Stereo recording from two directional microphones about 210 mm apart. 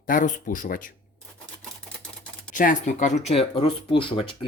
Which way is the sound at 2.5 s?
40° left (ahead or behind).